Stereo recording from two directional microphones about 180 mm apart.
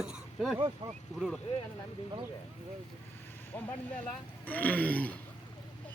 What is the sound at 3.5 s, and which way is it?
Speech, 10° left (ahead or behind).